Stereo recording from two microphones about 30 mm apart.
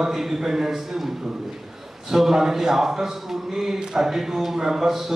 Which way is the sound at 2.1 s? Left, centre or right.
Centre.